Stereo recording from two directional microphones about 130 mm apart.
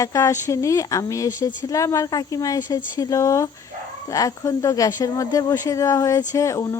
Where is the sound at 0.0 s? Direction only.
25° left (ahead or behind).